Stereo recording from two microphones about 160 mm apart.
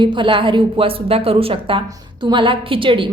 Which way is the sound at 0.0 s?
30° right (ahead or behind).